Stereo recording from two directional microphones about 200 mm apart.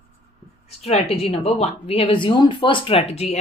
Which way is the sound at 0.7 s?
30° left (ahead or behind).